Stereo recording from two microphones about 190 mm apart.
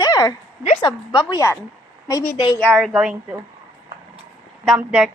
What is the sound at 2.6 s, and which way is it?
Speech, centre (ahead or behind).